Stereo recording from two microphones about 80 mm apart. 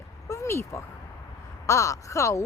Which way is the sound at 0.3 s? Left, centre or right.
Left.